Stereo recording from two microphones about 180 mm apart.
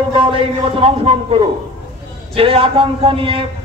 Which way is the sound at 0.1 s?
30° right (ahead or behind).